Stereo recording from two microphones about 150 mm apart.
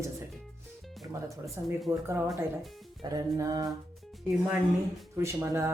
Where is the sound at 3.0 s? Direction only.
25° right (ahead or behind).